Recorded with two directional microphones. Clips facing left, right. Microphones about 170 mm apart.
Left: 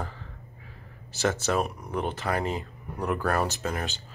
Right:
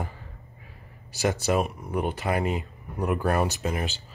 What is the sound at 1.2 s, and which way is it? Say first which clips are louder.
Speech: right 2 dB; 15° right (ahead or behind).